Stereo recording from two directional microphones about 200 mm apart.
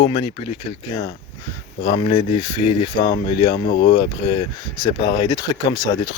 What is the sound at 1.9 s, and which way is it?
Speech, 25° left (ahead or behind).